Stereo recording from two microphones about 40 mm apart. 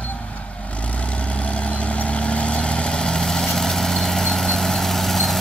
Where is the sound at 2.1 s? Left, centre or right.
Left.